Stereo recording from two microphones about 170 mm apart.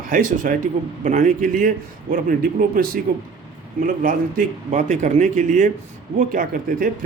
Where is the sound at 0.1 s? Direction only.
55° right (ahead or behind).